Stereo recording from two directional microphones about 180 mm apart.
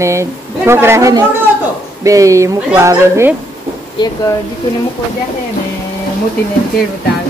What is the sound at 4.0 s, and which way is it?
Speech, 25° left (ahead or behind).